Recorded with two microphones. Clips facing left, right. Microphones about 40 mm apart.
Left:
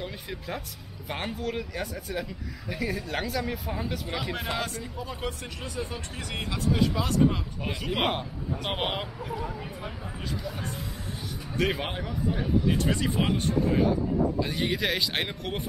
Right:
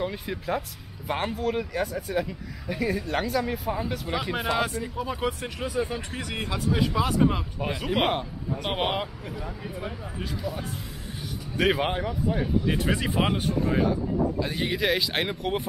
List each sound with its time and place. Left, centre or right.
0.0 s speech: centre
11.5 s speech: centre